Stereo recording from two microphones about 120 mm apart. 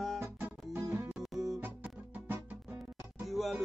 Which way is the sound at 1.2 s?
Centre (ahead or behind).